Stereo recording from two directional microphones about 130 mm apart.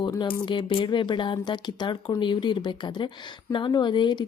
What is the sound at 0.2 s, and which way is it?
A woman's voice, 40° left (ahead or behind).